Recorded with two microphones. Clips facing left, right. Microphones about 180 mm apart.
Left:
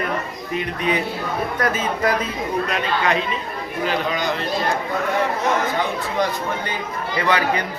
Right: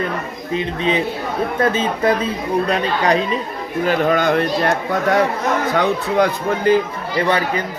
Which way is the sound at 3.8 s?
50° right (ahead or behind).